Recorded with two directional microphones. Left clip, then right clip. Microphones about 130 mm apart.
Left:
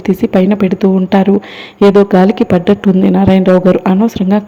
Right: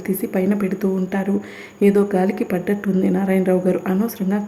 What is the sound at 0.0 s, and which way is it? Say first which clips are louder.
Speech: left 10 dB; 35° left (ahead or behind).